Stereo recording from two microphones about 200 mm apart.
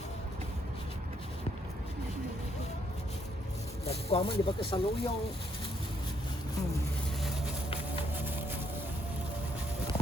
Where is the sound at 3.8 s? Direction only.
30° left (ahead or behind).